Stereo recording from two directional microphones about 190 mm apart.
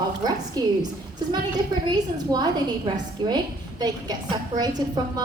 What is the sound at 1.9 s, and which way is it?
A woman's voice, 20° right (ahead or behind).